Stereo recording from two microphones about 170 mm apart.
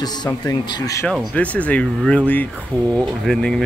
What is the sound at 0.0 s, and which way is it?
Speech, 20° left (ahead or behind).